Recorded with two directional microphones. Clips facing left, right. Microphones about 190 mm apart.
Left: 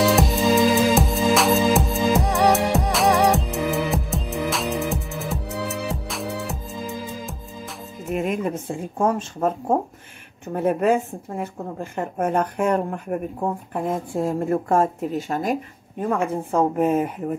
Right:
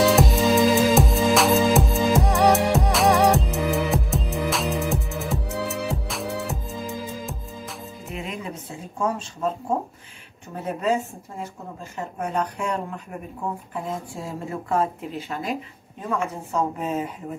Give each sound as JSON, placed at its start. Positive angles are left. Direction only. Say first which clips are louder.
{"t": 0.0, "sound": "music", "louder": "even", "side_deg": 0}
{"t": 8.1, "sound": "a sound", "louder": "left 10 dB", "side_deg": 50}
{"t": 10.5, "sound": "speech", "louder": "left 5 dB", "side_deg": 55}